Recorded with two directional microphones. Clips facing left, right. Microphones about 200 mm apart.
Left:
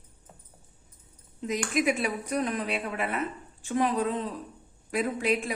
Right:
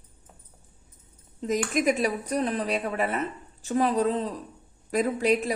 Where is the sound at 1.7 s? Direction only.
40° right (ahead or behind).